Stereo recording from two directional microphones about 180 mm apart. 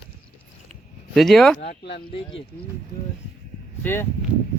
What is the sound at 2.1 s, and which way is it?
Speech, 30° left (ahead or behind).